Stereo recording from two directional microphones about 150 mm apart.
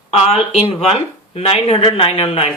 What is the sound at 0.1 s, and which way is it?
Speech, 45° left (ahead or behind).